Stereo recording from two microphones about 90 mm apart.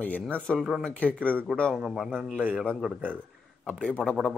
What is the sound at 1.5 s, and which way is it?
Speech, 10° left (ahead or behind).